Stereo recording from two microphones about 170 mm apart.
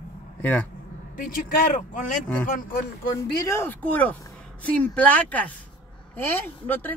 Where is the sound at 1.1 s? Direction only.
55° left (ahead or behind).